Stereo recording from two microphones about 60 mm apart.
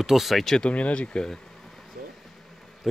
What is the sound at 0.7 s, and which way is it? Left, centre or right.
Speech, centre.